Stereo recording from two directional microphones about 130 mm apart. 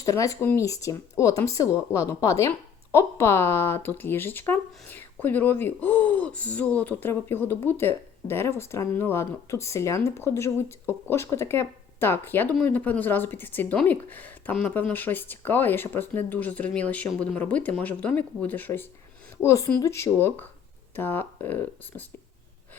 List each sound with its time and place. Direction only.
0.0 s speech: 25° left (ahead or behind)